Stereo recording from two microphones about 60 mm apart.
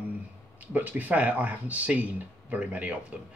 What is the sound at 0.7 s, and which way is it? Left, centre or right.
Speech, right.